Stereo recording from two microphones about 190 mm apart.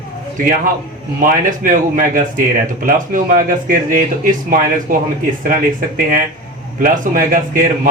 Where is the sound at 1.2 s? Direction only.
45° right (ahead or behind).